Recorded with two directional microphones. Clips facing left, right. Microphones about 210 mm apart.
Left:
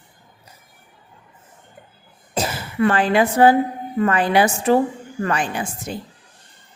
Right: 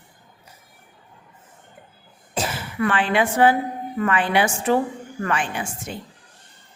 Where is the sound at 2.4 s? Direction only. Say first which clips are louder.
Left 4 dB; 40° left (ahead or behind).